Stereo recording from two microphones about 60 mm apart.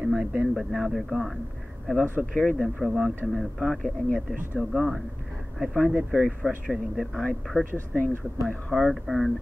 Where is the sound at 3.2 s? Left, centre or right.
Centre.